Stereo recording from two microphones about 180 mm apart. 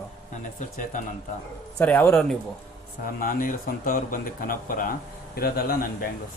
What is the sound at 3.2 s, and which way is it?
Speech, 50° left (ahead or behind).